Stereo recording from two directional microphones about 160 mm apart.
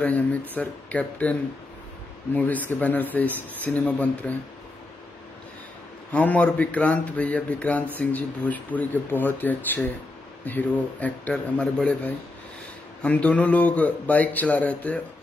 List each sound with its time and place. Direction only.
0.0 s a man's voice: 10° left (ahead or behind)
2.3 s a man's voice: 10° left (ahead or behind)
6.1 s a man's voice: 10° left (ahead or behind)